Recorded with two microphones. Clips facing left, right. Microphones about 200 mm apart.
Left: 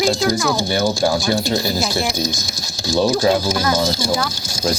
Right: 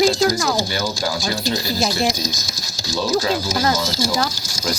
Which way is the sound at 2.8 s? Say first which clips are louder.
Left 4 dB; 55° left (ahead or behind).